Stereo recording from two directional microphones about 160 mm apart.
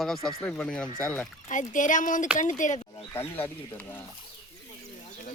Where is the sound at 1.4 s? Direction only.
55° left (ahead or behind).